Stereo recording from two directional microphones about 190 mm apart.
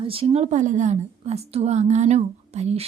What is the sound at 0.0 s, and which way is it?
A woman's voice, 30° right (ahead or behind).